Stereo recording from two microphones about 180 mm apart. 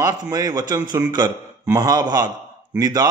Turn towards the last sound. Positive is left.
turn(degrees=-20)  # may be behind; listen again after turning